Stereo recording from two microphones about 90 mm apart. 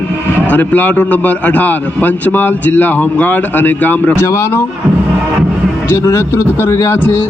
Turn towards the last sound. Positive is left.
turn(degrees=30)  # may be behind; listen again after turning